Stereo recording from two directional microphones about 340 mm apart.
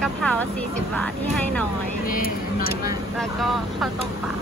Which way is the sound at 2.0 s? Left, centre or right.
Left.